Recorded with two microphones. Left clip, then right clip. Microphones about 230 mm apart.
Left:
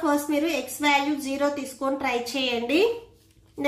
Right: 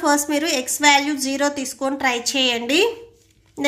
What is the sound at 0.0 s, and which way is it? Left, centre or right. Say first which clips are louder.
A woman's voice: right 5 dB; right.